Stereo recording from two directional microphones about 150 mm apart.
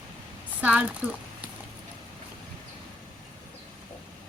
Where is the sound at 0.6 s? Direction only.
10° right (ahead or behind).